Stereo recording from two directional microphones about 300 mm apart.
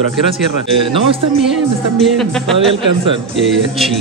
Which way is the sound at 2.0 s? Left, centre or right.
Centre.